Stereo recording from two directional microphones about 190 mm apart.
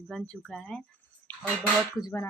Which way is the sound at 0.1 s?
Centre (ahead or behind).